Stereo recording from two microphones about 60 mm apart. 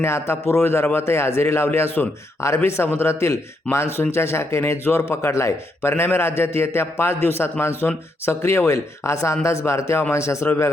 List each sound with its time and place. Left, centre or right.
0.0 s a man's voice: left